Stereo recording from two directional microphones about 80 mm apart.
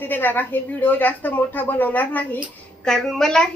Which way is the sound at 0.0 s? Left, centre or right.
Left.